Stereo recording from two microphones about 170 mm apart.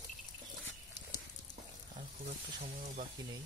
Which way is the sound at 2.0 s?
50° right (ahead or behind).